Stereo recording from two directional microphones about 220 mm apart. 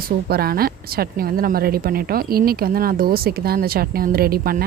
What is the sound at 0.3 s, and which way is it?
A woman's voice, 45° right (ahead or behind).